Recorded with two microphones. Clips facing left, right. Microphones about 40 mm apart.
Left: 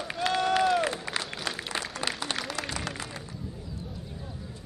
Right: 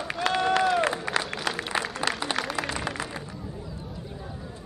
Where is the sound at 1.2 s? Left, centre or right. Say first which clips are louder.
Right 4 dB; centre.